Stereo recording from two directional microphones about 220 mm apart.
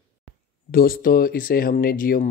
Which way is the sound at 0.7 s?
40° left (ahead or behind).